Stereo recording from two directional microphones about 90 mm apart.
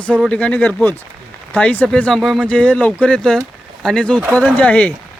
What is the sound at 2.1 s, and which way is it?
Speech, centre (ahead or behind).